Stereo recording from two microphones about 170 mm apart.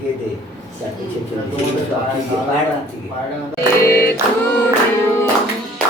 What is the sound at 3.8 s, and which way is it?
Choir, 15° left (ahead or behind).